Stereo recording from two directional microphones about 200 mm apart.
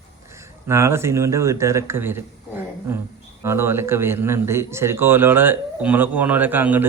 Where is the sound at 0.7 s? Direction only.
15° right (ahead or behind).